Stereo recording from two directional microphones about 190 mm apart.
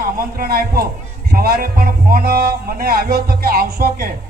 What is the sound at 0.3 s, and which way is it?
Speech, 55° right (ahead or behind).